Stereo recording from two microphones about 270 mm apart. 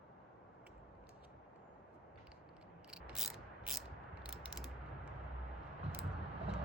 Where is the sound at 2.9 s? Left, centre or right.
Centre.